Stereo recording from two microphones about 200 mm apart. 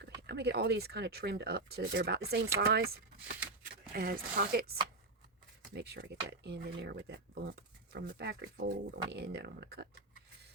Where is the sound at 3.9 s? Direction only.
45° right (ahead or behind).